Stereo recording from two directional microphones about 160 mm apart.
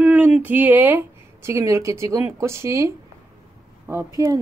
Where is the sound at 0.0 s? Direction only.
10° right (ahead or behind).